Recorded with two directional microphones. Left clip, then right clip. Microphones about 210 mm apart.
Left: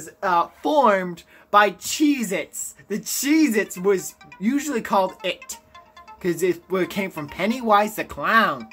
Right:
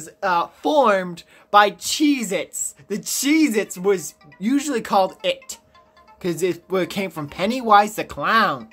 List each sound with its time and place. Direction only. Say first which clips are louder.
0.0 s speech: even; 10° right (ahead or behind)